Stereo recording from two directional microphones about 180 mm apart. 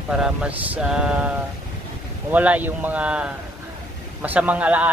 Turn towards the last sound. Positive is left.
turn(degrees=-5)  # may be behind; listen again after turning